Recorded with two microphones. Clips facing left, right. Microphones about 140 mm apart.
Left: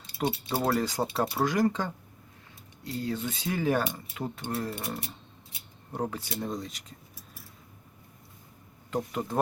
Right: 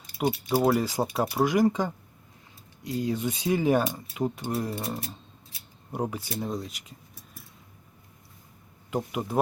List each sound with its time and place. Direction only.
0.2 s speech: centre (ahead or behind)
5.9 s speech: 10° right (ahead or behind)
8.9 s speech: 10° right (ahead or behind)